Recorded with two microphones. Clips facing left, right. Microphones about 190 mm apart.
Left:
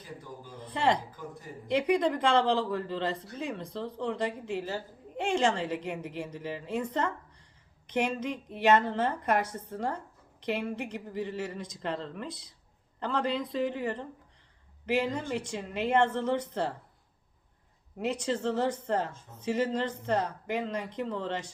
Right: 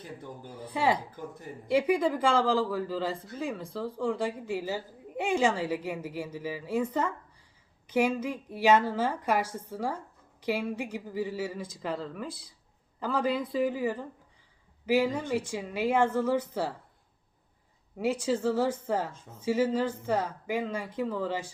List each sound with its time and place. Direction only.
0.7 s a woman's voice: 5° right (ahead or behind)
17.9 s a woman's voice: 5° right (ahead or behind)